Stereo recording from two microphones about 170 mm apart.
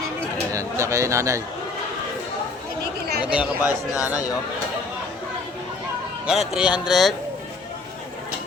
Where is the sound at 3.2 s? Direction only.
10° right (ahead or behind).